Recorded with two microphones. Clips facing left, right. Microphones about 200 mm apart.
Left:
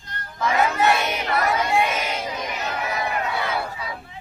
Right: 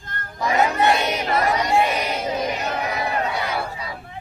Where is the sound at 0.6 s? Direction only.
20° right (ahead or behind).